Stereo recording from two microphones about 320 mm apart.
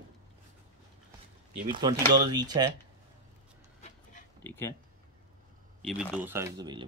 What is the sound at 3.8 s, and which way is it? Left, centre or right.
Dog, left.